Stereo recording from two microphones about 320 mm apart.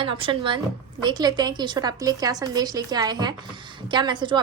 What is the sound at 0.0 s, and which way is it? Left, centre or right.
A woman's voice, centre.